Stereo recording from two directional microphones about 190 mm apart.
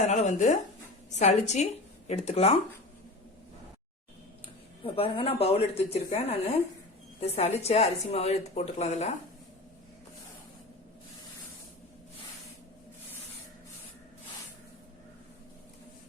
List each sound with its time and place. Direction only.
0.0 s a woman's voice: 35° left (ahead or behind)
4.8 s a woman's voice: 30° left (ahead or behind)